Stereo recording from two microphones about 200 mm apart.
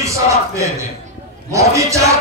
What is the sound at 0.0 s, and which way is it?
A man's voice, 15° right (ahead or behind).